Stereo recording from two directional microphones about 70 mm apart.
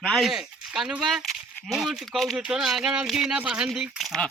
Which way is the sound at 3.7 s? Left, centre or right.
Centre.